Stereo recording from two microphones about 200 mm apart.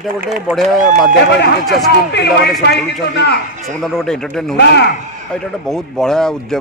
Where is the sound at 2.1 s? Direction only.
55° left (ahead or behind).